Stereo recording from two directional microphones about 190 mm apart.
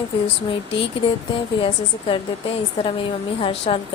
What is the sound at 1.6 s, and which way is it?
Speech, 30° left (ahead or behind).